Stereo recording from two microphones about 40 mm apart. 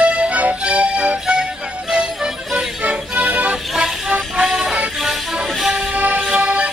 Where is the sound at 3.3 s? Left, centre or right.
Right.